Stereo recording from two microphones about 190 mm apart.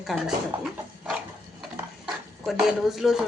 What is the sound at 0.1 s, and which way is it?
Speech, centre (ahead or behind).